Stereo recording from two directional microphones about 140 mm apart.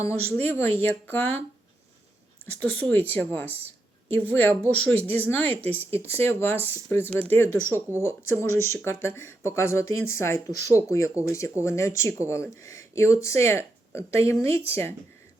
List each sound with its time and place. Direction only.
0.4 s a woman's voice: 15° left (ahead or behind)
2.6 s a woman's voice: 10° left (ahead or behind)
6.6 s speech: 20° right (ahead or behind)
6.9 s a woman's voice: 15° left (ahead or behind)